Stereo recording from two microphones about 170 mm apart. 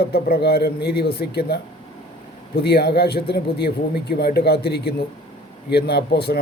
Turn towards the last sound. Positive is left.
turn(degrees=75)  # may be behind; listen again after turning